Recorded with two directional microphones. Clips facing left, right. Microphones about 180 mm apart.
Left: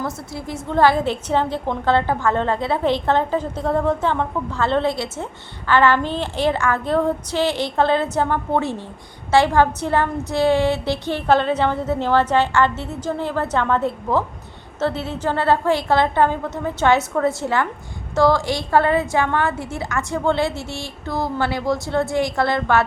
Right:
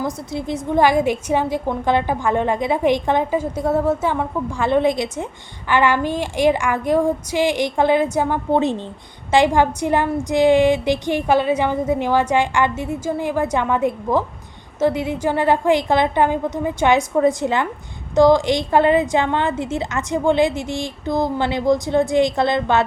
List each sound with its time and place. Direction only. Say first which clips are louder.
0.0 s a woman's voice: right 3 dB; 20° right (ahead or behind)